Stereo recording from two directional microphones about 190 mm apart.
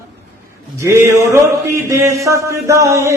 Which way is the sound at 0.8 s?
15° right (ahead or behind).